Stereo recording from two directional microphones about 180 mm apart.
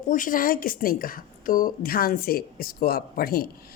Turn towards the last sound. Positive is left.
turn(degrees=55)  # may be behind; listen again after turning